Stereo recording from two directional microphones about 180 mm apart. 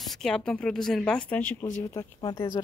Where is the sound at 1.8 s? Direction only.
20° left (ahead or behind).